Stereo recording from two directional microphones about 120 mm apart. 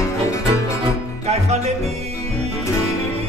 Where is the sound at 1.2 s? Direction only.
65° right (ahead or behind).